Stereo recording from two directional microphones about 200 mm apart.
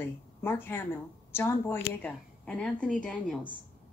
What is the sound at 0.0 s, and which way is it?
Speech, 10° left (ahead or behind).